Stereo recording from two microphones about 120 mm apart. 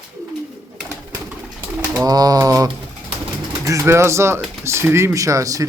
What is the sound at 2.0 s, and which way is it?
Pigeon, 30° right (ahead or behind).